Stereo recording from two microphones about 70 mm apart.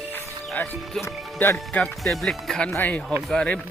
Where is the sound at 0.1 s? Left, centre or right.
Left.